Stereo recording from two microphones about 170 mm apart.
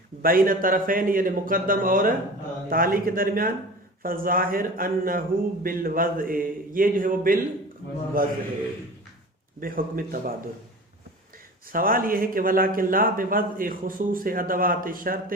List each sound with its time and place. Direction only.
0.2 s speech: 55° right (ahead or behind)
9.6 s speech: 55° right (ahead or behind)
11.7 s speech: 55° right (ahead or behind)